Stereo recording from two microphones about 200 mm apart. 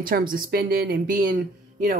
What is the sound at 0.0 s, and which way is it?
Speech, 45° right (ahead or behind).